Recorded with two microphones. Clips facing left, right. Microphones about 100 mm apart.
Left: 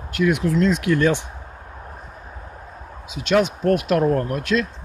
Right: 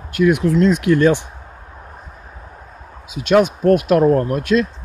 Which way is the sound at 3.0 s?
30° left (ahead or behind).